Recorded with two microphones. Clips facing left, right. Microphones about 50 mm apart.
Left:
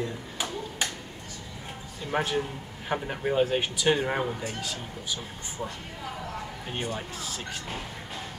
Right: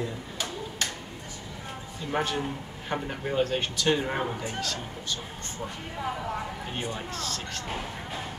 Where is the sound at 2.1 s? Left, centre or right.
Centre.